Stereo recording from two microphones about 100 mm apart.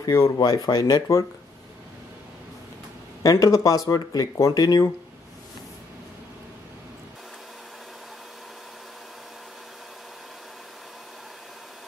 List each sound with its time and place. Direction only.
0.0 s speech: 35° left (ahead or behind)
3.2 s speech: 35° left (ahead or behind)